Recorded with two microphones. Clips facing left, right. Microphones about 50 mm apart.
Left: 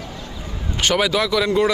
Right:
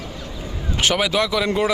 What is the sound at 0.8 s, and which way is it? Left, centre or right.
Speech, centre.